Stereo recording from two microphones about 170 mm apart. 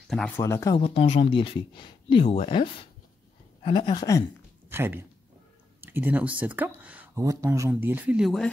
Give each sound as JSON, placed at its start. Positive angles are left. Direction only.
{"t": 0.1, "sound": "speech", "side_deg": 5}
{"t": 0.4, "sound": "speech", "side_deg": 15}
{"t": 0.7, "sound": "speech", "side_deg": 35}
{"t": 3.6, "sound": "a sound", "side_deg": 25}
{"t": 4.6, "sound": "speech", "side_deg": -15}